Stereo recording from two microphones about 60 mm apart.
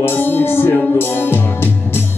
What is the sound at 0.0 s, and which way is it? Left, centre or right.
Music, left.